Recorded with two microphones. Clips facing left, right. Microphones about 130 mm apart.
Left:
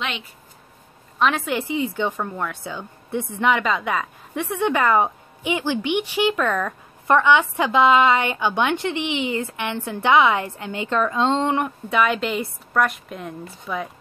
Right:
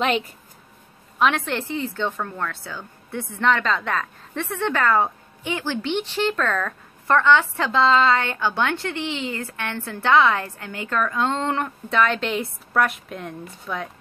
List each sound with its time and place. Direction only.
1.2 s speech: 5° left (ahead or behind)